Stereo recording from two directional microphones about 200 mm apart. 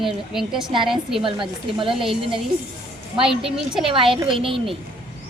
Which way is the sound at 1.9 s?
Centre (ahead or behind).